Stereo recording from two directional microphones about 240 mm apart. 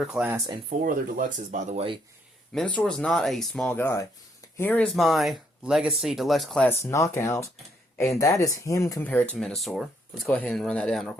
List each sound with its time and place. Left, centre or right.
0.0 s speech: centre
0.7 s speech: right
2.5 s speech: centre